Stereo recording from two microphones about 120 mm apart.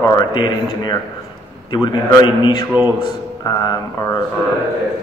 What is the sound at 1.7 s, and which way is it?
Speech, 40° left (ahead or behind).